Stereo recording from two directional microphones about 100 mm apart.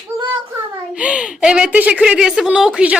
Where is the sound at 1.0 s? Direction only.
10° right (ahead or behind).